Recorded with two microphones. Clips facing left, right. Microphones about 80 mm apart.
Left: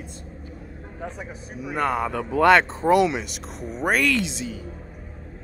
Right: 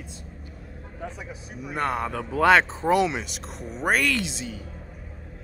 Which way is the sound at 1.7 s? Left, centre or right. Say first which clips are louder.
Left 3 dB; centre.